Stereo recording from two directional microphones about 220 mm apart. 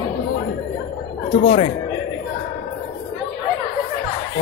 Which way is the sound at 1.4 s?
25° left (ahead or behind).